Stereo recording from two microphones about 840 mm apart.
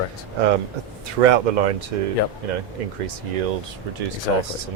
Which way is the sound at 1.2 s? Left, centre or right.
Right.